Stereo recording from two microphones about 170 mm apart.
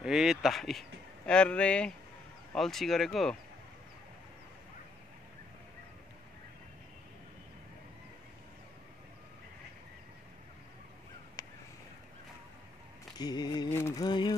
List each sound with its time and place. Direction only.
0.0 s speech: 5° right (ahead or behind)
11.4 s crow: 25° left (ahead or behind)
13.2 s mantra: 25° left (ahead or behind)
13.7 s a sound: 15° left (ahead or behind)
14.0 s mantra: 25° left (ahead or behind)